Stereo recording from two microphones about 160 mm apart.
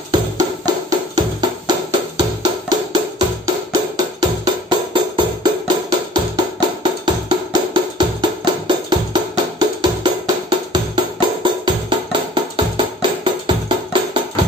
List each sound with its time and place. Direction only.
0.1 s music: 25° right (ahead or behind)